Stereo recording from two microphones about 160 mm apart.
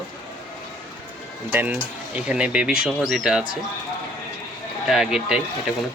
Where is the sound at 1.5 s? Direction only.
10° right (ahead or behind).